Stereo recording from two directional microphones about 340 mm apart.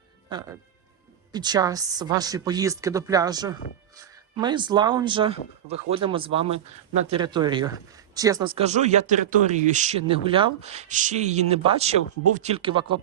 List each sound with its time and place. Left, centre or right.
1.3 s speech: centre